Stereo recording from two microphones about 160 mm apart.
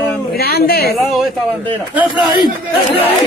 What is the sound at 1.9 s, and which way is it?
Speech, 30° left (ahead or behind).